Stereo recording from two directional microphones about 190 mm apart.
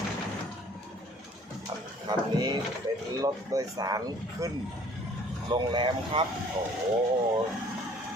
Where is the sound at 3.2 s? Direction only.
20° right (ahead or behind).